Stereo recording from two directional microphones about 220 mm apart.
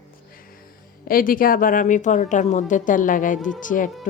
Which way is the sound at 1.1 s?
40° left (ahead or behind).